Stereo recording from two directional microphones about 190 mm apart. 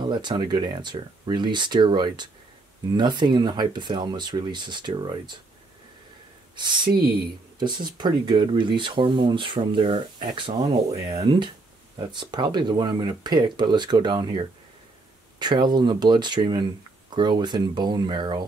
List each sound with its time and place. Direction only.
0.1 s speech: 25° right (ahead or behind)
6.5 s speech: 25° right (ahead or behind)